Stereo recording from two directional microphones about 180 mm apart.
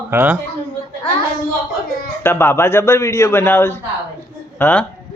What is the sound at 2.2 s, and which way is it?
A man's voice, 15° left (ahead or behind).